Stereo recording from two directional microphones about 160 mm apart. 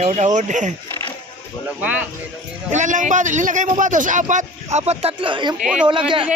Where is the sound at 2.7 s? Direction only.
50° right (ahead or behind); by 5.5 s 30° right (ahead or behind).